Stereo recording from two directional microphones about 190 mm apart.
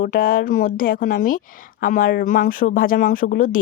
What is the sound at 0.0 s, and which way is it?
Speech, 50° left (ahead or behind).